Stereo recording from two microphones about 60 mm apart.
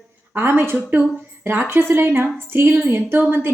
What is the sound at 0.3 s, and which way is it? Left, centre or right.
A woman's voice, right.